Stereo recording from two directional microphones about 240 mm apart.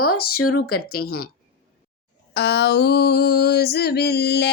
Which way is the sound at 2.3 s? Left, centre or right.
Left.